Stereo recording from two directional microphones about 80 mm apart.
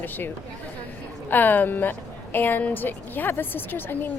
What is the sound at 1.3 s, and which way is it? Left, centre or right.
A woman's voice, left.